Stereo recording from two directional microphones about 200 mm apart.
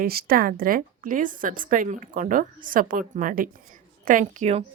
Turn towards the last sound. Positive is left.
turn(degrees=-40)  # may be behind; listen again after turning